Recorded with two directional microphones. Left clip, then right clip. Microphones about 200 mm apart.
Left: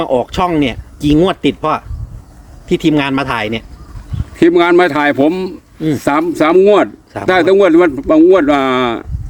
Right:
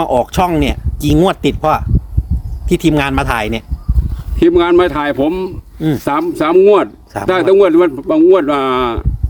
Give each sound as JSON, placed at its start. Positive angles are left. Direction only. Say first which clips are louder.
{"t": 0.0, "sound": "speech", "louder": "right 1 dB", "side_deg": -45}
{"t": 4.4, "sound": "a man's voice", "louder": "left 1 dB", "side_deg": 10}